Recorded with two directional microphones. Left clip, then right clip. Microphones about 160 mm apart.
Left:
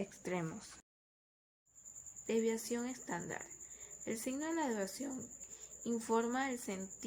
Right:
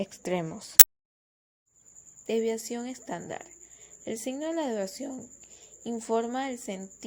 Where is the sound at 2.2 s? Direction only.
30° right (ahead or behind).